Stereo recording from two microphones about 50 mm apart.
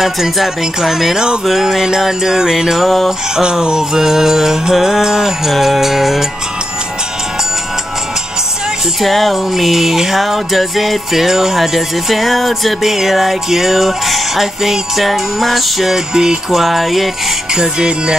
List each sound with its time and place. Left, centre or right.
0.0 s music: centre
9.0 s music: centre
16.1 s music: centre
17.6 s music: centre